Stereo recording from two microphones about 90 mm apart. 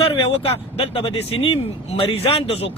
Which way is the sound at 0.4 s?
90° left.